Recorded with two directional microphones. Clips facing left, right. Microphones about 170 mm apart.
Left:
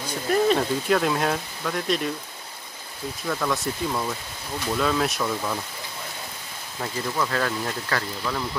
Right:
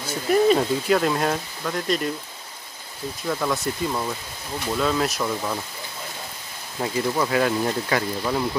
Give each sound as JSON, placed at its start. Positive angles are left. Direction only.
{"t": 0.3, "sound": "speech", "side_deg": -5}
{"t": 3.3, "sound": "speech", "side_deg": -5}
{"t": 6.8, "sound": "speech", "side_deg": -15}